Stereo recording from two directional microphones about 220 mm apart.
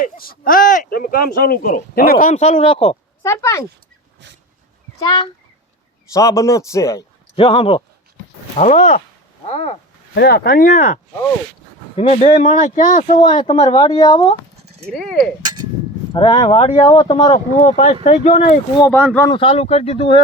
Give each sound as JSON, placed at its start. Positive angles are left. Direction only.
{"t": 0.0, "sound": "speech", "side_deg": 40}
{"t": 3.2, "sound": "a man's voice", "side_deg": 15}
{"t": 4.9, "sound": "a man's voice", "side_deg": 20}
{"t": 10.2, "sound": "speech", "side_deg": 45}
{"t": 13.2, "sound": "speech", "side_deg": 25}
{"t": 14.8, "sound": "speech", "side_deg": 0}
{"t": 16.1, "sound": "speech", "side_deg": 25}
{"t": 19.1, "sound": "a man's voice", "side_deg": 15}
{"t": 19.4, "sound": "speech", "side_deg": 25}